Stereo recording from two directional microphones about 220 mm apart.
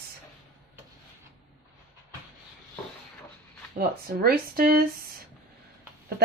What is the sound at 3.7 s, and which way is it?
Speech, 45° right (ahead or behind).